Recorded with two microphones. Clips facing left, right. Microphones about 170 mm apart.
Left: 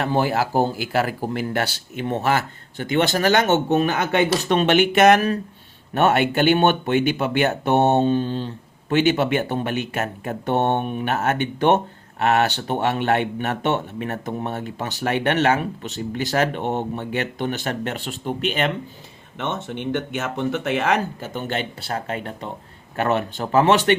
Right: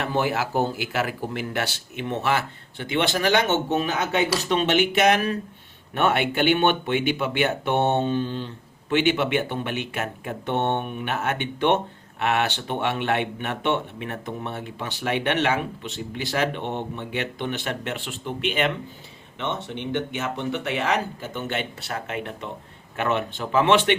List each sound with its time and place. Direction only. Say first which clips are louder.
0.0 s speech: left 4 dB; 35° left (ahead or behind)